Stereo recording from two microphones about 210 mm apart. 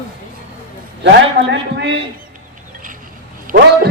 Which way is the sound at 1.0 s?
60° right (ahead or behind).